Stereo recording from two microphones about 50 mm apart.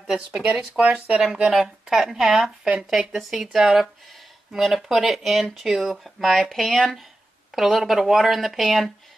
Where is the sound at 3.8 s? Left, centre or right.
Centre.